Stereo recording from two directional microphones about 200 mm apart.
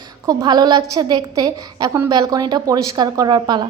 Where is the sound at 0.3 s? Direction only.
20° right (ahead or behind).